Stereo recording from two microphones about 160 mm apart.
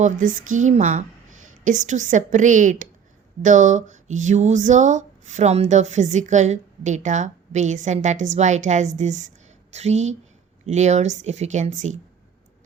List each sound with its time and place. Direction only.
0.0 s speech: 55° right (ahead or behind)